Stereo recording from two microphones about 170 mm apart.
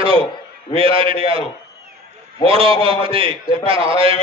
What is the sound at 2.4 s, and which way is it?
A man's voice, 35° right (ahead or behind).